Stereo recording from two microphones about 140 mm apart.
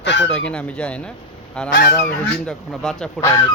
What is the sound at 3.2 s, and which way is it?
Speech, 20° left (ahead or behind).